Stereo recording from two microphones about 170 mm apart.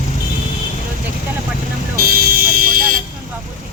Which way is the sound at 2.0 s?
60° right (ahead or behind).